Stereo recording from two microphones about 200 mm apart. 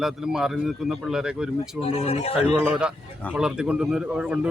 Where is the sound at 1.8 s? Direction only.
30° left (ahead or behind).